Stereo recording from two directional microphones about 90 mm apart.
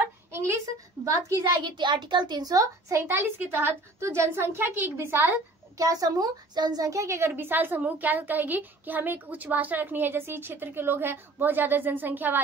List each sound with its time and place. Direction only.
0.3 s a child's voice: 30° right (ahead or behind)
3.0 s a woman's voice: 25° right (ahead or behind)
5.8 s a woman's voice: 40° right (ahead or behind); by 12.4 s 20° right (ahead or behind)